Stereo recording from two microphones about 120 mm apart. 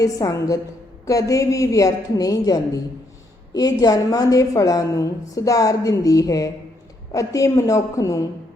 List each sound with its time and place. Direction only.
0.0 s a woman's voice: 25° left (ahead or behind)